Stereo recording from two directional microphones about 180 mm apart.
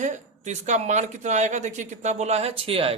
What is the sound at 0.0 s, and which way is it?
Speech, 40° right (ahead or behind).